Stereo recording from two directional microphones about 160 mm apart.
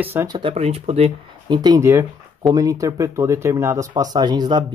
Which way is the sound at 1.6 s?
20° right (ahead or behind).